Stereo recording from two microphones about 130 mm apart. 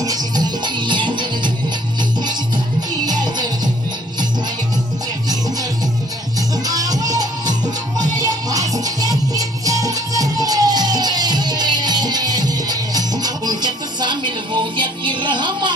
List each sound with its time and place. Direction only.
0.0 s music: 30° right (ahead or behind)
6.7 s music: 30° right (ahead or behind)